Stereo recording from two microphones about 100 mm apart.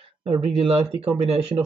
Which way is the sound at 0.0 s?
70° right (ahead or behind).